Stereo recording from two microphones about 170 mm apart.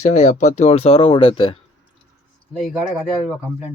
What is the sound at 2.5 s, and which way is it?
Speech, centre (ahead or behind).